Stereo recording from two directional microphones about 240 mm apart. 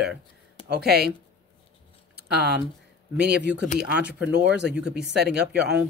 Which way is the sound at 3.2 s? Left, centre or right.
Right.